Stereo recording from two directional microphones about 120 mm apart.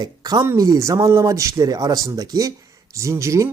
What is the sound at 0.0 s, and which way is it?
Speech, 35° right (ahead or behind).